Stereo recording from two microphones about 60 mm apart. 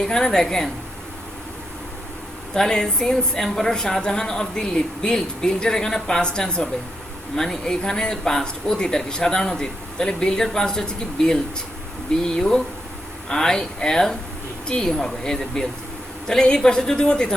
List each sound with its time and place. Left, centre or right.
0.0 s a woman's voice: centre
2.6 s a woman's voice: centre